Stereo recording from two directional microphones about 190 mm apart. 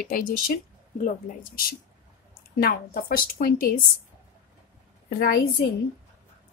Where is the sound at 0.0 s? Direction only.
50° left (ahead or behind).